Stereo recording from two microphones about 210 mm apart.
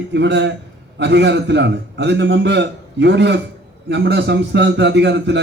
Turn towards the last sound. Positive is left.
turn(degrees=-55)  # may be behind; listen again after turning